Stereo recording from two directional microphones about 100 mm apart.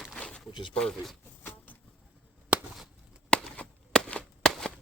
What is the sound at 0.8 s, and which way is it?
Speech, 5° left (ahead or behind).